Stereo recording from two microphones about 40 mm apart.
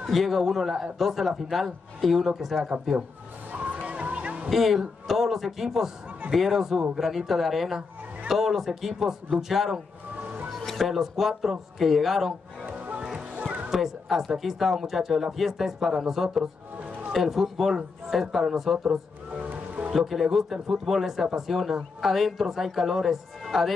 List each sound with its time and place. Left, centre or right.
0.0 s speech: centre
3.5 s music: right
4.5 s speech: centre
10.6 s a sound: centre
10.9 s speech: centre
12.6 s music: right
13.7 s a sound: centre
14.3 s speech: centre
18.9 s music: right
19.5 s music: right
19.9 s speech: centre